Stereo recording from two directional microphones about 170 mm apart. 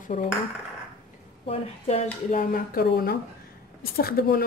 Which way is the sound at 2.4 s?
60° left (ahead or behind).